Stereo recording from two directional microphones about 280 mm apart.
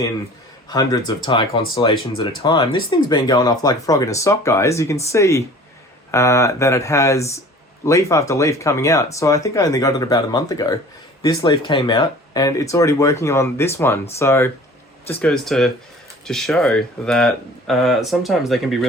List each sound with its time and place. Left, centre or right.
0.7 s speech: centre